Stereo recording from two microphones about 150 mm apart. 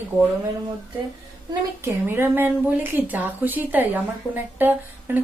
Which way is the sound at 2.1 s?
15° right (ahead or behind).